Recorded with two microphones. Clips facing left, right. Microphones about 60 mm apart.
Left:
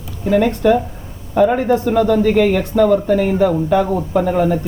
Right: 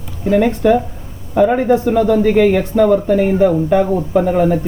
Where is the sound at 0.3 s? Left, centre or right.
Centre.